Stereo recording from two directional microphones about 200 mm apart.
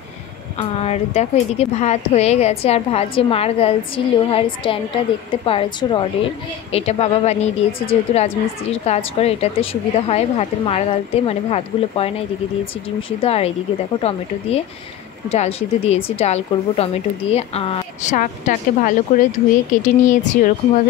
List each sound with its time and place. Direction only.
0.6 s a woman's voice: 35° left (ahead or behind)
13.2 s a woman's voice: 30° left (ahead or behind)
15.2 s a woman's voice: 30° left (ahead or behind)